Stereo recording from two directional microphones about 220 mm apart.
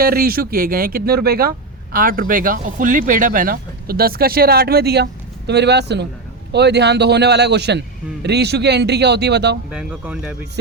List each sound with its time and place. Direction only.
0.0 s speech: 45° right (ahead or behind)
9.6 s speech: 5° right (ahead or behind)